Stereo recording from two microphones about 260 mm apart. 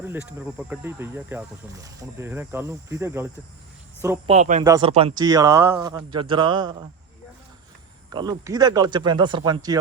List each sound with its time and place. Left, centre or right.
0.3 s speech: centre
4.3 s speech: right
4.6 s speech: centre
8.1 s speech: centre